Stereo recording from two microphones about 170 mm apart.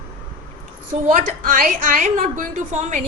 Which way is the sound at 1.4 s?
55° right (ahead or behind).